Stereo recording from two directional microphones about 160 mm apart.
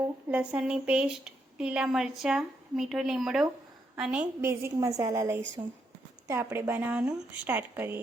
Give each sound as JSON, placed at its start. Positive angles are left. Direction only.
{"t": 0.3, "sound": "a woman's voice", "side_deg": -10}